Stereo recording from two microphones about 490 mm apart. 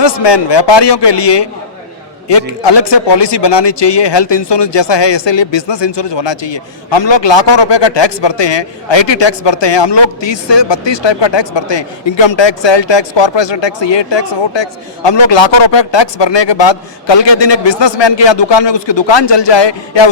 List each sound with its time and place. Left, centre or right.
0.0 s a man's voice: left